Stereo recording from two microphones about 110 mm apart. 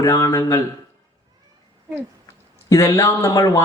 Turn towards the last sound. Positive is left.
turn(degrees=30)  # may be behind; listen again after turning